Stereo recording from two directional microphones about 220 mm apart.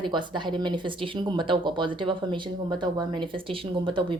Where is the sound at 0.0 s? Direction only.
20° right (ahead or behind).